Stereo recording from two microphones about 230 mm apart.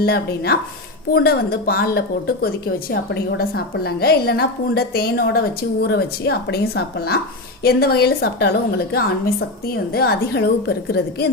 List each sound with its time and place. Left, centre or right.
0.0 s a woman's voice: left